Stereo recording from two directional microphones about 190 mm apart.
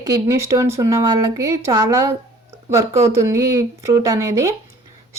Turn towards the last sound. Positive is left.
turn(degrees=-15)  # may be behind; listen again after turning